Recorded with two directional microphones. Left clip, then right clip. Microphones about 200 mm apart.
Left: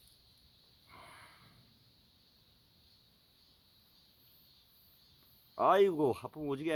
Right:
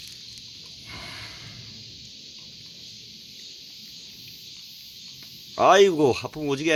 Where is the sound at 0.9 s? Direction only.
Centre (ahead or behind).